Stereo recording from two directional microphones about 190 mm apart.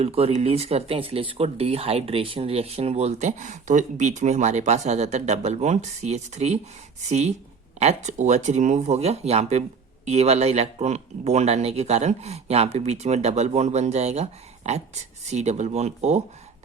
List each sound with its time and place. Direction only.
0.0 s speech: 30° right (ahead or behind)